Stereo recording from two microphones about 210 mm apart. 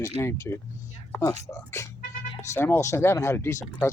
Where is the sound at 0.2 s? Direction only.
15° left (ahead or behind).